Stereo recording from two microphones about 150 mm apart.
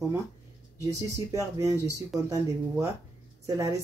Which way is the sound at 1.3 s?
20° right (ahead or behind).